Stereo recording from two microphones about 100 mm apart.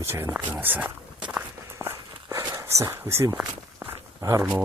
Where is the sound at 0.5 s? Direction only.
15° right (ahead or behind).